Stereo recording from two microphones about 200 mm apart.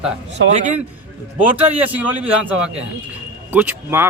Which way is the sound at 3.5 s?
10° right (ahead or behind).